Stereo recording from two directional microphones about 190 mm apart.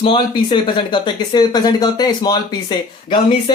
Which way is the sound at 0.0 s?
25° left (ahead or behind).